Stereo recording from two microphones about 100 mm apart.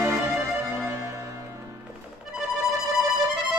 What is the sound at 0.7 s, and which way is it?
Music, 25° right (ahead or behind).